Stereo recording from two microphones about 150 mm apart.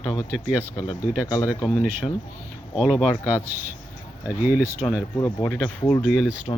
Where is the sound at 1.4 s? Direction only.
10° right (ahead or behind).